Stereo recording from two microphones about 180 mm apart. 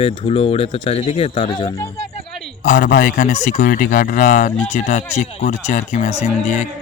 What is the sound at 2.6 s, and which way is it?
A man's voice, 50° left (ahead or behind).